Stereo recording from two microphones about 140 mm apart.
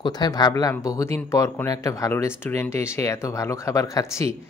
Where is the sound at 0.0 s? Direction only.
30° left (ahead or behind).